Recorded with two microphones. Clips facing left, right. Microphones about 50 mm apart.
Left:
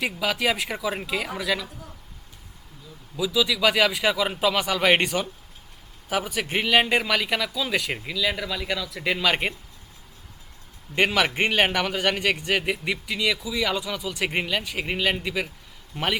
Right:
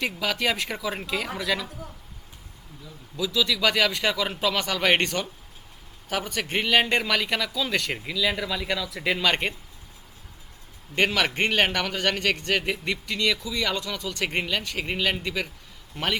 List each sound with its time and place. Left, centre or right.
0.0 s a man's voice: centre
3.2 s a man's voice: centre
10.9 s a man's voice: centre